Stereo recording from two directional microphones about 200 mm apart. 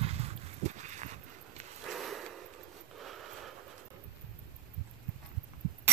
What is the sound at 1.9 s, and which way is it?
Sniff, centre (ahead or behind).